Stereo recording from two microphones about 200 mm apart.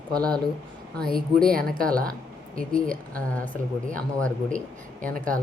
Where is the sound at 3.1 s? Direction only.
5° left (ahead or behind).